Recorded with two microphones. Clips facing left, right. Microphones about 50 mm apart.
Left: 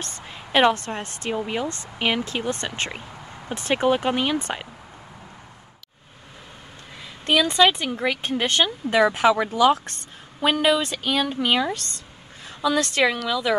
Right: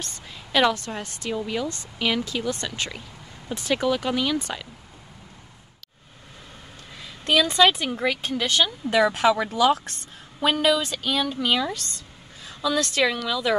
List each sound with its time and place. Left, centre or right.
0.0 s a woman's voice: left
7.0 s a sound: centre
7.8 s speech: centre
8.2 s speech: left
8.9 s speech: left
11.7 s a woman's voice: left
12.4 s a woman's voice: left
13.3 s speech: centre